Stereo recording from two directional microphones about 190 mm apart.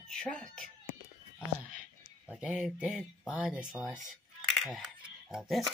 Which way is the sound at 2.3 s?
5° right (ahead or behind).